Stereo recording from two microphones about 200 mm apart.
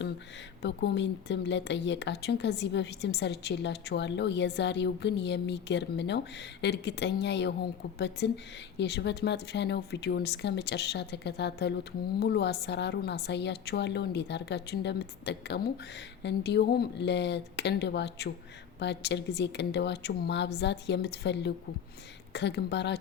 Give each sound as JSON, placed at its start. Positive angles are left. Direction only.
{"t": 0.6, "sound": "speech", "side_deg": 60}